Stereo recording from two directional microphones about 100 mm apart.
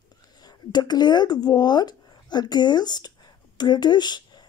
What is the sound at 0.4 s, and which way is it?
A woman's voice, 45° left (ahead or behind).